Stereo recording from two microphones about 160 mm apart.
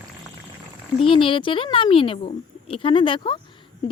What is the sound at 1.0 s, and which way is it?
A woman's voice, 35° left (ahead or behind).